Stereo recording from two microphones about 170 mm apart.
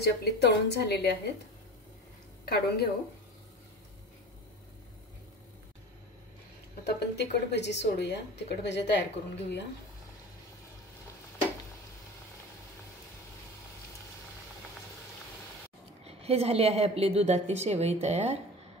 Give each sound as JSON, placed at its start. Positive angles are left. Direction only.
{"t": 0.0, "sound": "a woman's voice", "side_deg": 80}
{"t": 2.4, "sound": "speech", "side_deg": 65}
{"t": 6.8, "sound": "speech", "side_deg": 70}
{"t": 16.0, "sound": "a woman's voice", "side_deg": -35}